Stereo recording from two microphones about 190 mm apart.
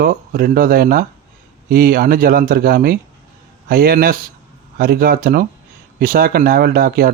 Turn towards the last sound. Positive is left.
turn(degrees=-50)  # may be behind; listen again after turning